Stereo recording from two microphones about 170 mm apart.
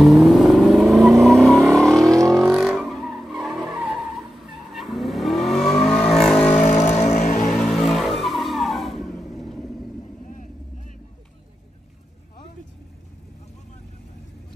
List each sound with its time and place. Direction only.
0.0 s vehicle: centre (ahead or behind)
6.6 s a sound: 40° left (ahead or behind)
7.1 s vehicle: 45° left (ahead or behind)
7.5 s vehicle: centre (ahead or behind)